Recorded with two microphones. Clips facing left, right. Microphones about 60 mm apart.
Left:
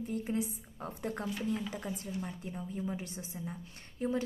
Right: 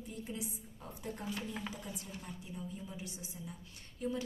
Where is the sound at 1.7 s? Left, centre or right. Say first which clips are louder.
Left 6 dB; left.